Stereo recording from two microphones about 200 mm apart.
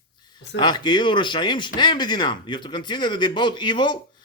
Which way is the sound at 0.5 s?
20° left (ahead or behind).